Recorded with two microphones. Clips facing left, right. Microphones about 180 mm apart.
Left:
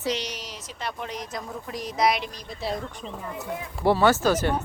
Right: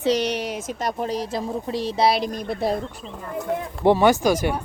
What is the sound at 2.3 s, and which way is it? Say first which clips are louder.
Speech: right 7 dB; 50° right (ahead or behind).